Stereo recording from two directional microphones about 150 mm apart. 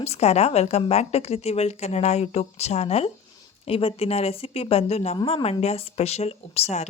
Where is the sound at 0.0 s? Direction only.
45° left (ahead or behind).